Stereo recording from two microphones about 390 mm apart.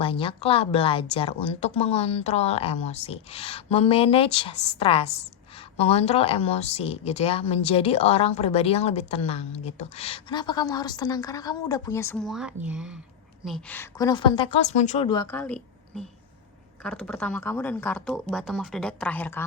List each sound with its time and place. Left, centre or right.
0.0 s speech: centre